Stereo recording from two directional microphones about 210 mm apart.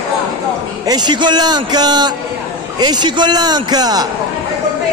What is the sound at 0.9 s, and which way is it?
A man's voice, 20° right (ahead or behind).